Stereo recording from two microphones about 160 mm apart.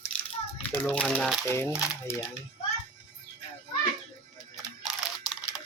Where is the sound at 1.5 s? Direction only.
15° left (ahead or behind).